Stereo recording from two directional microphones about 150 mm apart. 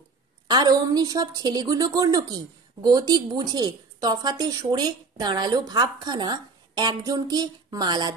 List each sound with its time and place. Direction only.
0.5 s a woman's voice: 25° right (ahead or behind)